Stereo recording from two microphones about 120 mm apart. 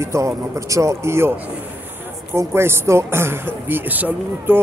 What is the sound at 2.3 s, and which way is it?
A woman's voice, 20° right (ahead or behind).